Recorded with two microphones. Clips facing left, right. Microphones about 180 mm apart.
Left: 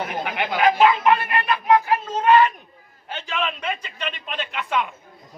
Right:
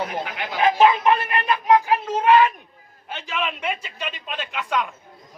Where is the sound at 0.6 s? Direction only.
20° right (ahead or behind).